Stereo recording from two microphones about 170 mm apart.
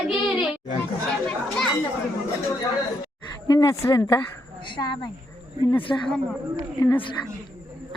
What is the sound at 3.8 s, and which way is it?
Speech, 20° left (ahead or behind).